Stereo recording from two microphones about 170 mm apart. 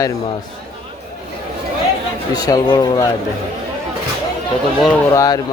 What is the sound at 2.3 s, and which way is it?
Speech, 25° left (ahead or behind).